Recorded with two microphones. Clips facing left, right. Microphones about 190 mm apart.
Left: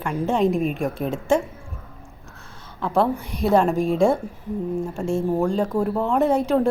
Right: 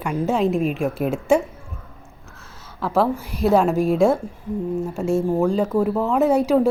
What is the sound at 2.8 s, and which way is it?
A woman's voice, 5° right (ahead or behind).